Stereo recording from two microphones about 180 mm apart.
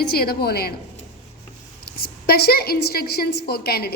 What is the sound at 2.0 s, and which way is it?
A woman's voice, 60° left (ahead or behind).